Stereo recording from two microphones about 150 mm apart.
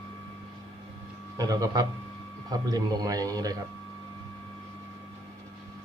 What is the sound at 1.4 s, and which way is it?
A man's voice, 25° right (ahead or behind).